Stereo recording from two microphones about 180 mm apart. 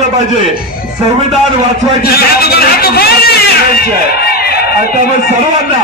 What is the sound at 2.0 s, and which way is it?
Speech, 60° left (ahead or behind).